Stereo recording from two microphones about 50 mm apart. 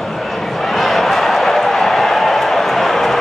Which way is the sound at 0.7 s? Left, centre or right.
Centre.